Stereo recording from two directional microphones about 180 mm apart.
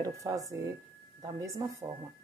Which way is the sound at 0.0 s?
20° right (ahead or behind).